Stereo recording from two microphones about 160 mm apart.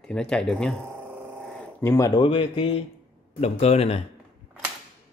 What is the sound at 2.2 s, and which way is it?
Speech, 35° left (ahead or behind).